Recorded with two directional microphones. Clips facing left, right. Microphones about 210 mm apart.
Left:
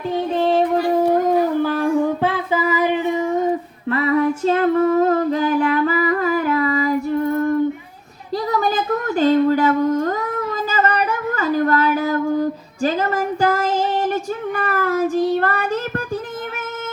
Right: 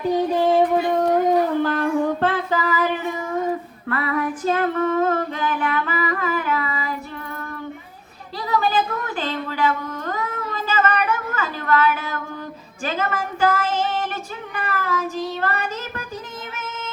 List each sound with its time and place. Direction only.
0.3 s music: 5° right (ahead or behind)
0.9 s howl: 10° left (ahead or behind)
3.8 s female singing: 20° left (ahead or behind); by 7.3 s 40° left (ahead or behind)
8.4 s a sound: 40° left (ahead or behind)